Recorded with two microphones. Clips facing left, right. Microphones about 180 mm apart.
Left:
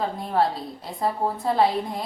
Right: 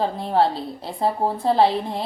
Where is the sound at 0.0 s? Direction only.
30° right (ahead or behind).